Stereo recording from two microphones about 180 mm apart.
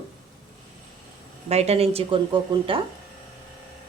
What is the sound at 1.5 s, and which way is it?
Speech, 35° right (ahead or behind).